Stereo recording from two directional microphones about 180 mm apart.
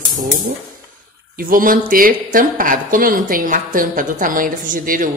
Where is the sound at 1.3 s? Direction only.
50° right (ahead or behind).